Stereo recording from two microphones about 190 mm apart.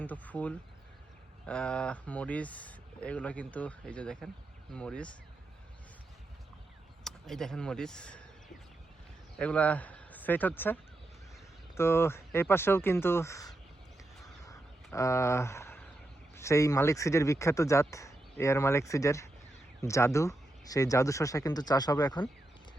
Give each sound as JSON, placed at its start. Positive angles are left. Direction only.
{"t": 0.0, "sound": "speech", "side_deg": 10}
{"t": 7.0, "sound": "speech", "side_deg": 0}
{"t": 9.4, "sound": "speech", "side_deg": 5}
{"t": 14.9, "sound": "speech", "side_deg": 15}